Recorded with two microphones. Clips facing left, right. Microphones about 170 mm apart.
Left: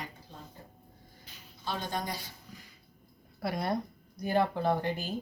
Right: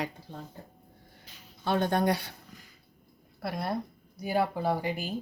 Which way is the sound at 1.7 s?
60° right (ahead or behind).